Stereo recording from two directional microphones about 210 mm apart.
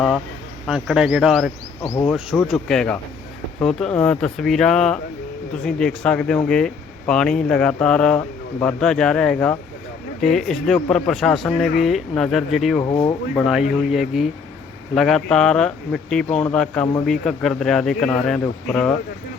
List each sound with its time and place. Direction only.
0.7 s speech: 5° right (ahead or behind)
12.8 s speech: 20° left (ahead or behind)
13.3 s speech: centre (ahead or behind)